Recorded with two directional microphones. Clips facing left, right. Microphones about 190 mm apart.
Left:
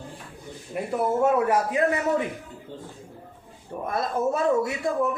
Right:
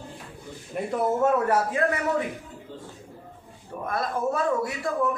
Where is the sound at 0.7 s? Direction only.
10° left (ahead or behind).